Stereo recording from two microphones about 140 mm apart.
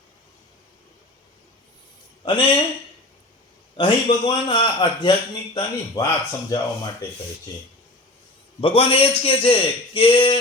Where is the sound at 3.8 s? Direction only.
35° left (ahead or behind).